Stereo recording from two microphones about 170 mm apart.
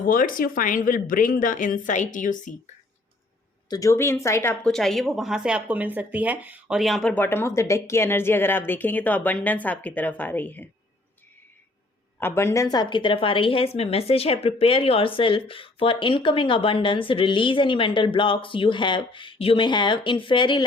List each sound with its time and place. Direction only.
0.0 s a woman's voice: 55° left (ahead or behind)
3.7 s speech: 20° left (ahead or behind)
4.6 s speech: centre (ahead or behind)
12.2 s a woman's voice: 15° left (ahead or behind)